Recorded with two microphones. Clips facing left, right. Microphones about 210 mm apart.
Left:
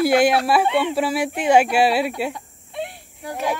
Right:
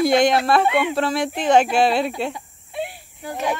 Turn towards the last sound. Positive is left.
turn(degrees=0)  # may be behind; listen again after turning